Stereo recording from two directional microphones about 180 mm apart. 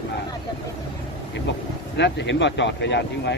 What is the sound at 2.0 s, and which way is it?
Speech, 80° left.